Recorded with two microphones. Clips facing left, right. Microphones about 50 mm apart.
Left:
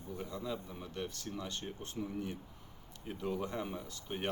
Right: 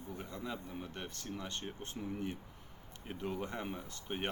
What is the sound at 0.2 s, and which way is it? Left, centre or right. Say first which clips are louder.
Speech: left 4 dB; right.